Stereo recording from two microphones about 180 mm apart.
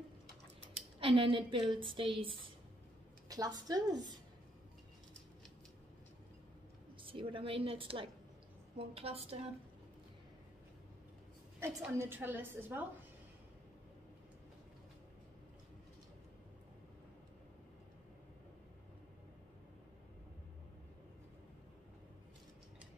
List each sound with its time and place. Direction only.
0.9 s a woman's voice: 30° right (ahead or behind)
7.0 s a woman's voice: 30° right (ahead or behind)
11.8 s a woman's voice: 10° right (ahead or behind)